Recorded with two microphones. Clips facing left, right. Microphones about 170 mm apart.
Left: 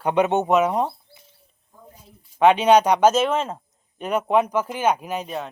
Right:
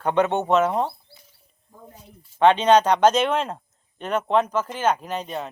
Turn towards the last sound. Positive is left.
turn(degrees=5)  # may be behind; listen again after turning